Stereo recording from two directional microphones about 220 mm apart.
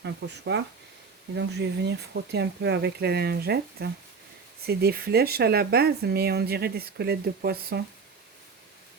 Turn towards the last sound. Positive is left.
turn(degrees=-45)  # may be behind; listen again after turning